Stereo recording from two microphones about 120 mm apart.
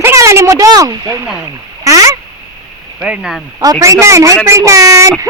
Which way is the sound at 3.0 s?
5° right (ahead or behind).